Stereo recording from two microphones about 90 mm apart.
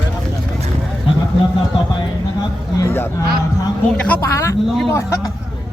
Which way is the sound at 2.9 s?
30° left (ahead or behind).